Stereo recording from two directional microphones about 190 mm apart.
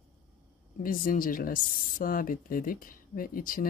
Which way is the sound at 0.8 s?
45° left (ahead or behind).